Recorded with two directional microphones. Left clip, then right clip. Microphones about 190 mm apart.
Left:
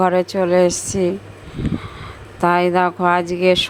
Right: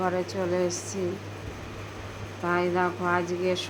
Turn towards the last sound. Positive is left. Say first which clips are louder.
# left 11 dB
turn(degrees=50)  # may be behind; listen again after turning